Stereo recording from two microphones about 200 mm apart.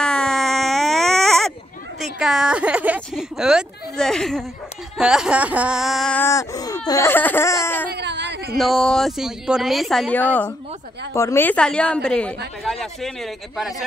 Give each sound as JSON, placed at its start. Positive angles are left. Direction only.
{"t": 0.0, "sound": "baby cry", "side_deg": 5}
{"t": 2.1, "sound": "speech", "side_deg": 0}
{"t": 6.9, "sound": "laughter", "side_deg": 15}
{"t": 7.9, "sound": "a sound", "side_deg": -60}
{"t": 8.5, "sound": "speech", "side_deg": 0}